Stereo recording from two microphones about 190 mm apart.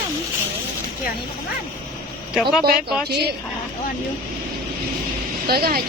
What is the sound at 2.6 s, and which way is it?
Speech, 55° right (ahead or behind).